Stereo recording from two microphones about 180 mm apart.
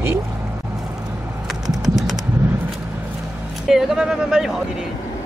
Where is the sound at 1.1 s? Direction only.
10° right (ahead or behind).